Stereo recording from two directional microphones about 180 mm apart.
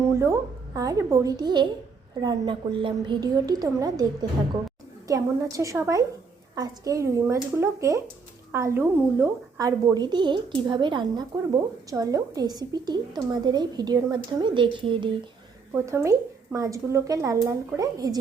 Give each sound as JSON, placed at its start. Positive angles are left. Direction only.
{"t": 0.2, "sound": "a woman's voice", "side_deg": -15}
{"t": 15.7, "sound": "a woman's voice", "side_deg": -15}